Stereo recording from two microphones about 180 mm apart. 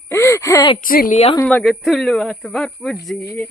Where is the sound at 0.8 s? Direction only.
50° left (ahead or behind).